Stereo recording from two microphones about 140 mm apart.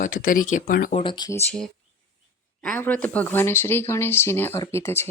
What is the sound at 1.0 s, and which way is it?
Speech, 35° left (ahead or behind).